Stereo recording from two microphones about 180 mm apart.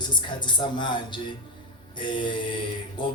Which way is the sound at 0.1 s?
25° left (ahead or behind).